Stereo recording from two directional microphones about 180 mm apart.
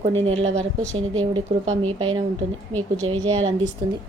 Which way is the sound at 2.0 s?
30° right (ahead or behind).